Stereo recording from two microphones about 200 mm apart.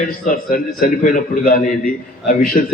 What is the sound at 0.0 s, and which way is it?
A man's voice, 45° left (ahead or behind).